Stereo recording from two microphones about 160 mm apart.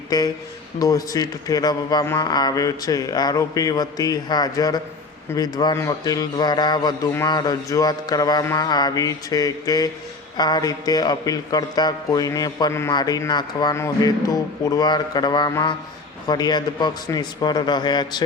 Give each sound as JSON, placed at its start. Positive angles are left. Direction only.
{"t": 0.1, "sound": "a man's voice", "side_deg": 25}